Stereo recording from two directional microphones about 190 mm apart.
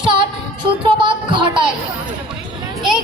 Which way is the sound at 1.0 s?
25° right (ahead or behind).